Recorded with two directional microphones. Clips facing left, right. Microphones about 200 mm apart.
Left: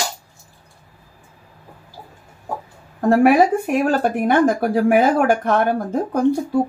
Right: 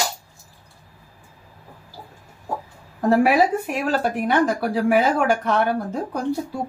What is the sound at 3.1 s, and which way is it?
Speech, 50° left (ahead or behind).